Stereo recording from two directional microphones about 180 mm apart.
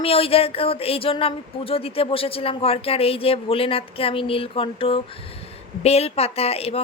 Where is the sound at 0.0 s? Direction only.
30° left (ahead or behind).